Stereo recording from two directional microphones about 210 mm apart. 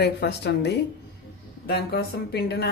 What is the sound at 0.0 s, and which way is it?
A woman's voice, 50° left (ahead or behind).